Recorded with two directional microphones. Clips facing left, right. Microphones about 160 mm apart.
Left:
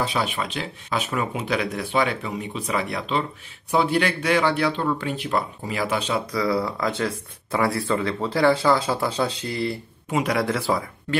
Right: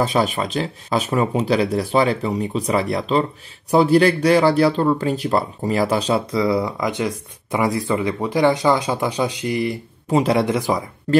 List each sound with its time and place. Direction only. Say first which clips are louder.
0.0 s speech: right 6 dB; 40° right (ahead or behind)
6.3 s speech: right 4 dB; 20° right (ahead or behind)
10.0 s speech: right 6 dB; 30° right (ahead or behind)